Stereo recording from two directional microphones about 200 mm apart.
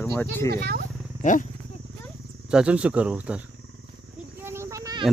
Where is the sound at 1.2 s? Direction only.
40° left (ahead or behind).